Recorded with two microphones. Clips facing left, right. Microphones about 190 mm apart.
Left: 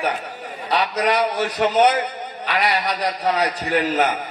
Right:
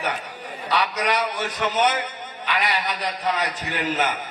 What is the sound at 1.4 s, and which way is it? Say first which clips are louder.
A man's voice: left 8 dB; 35° left (ahead or behind).